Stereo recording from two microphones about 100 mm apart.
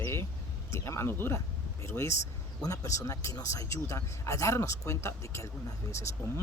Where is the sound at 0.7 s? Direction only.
25° left (ahead or behind).